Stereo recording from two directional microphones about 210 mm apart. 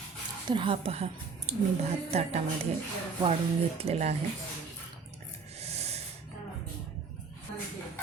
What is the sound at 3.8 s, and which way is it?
Speech, 30° right (ahead or behind).